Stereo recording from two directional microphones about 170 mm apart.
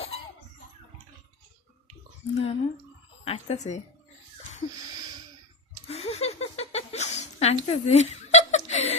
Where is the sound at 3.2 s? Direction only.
40° left (ahead or behind).